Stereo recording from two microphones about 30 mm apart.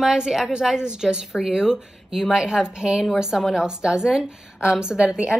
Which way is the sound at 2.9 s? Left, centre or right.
Centre.